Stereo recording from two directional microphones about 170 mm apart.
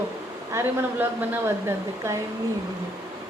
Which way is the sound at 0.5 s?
15° right (ahead or behind).